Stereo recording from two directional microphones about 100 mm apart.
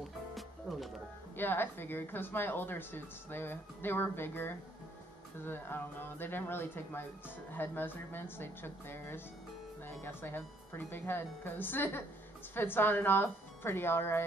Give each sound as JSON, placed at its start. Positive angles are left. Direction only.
{"t": 0.3, "sound": "music", "side_deg": 0}
{"t": 1.3, "sound": "speech", "side_deg": 20}